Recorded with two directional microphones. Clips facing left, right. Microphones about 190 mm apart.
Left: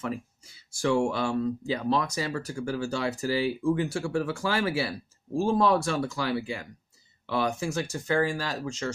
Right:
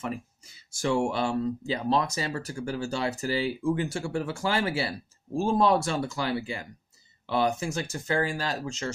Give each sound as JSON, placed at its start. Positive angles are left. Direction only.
{"t": 0.7, "sound": "speech", "side_deg": -25}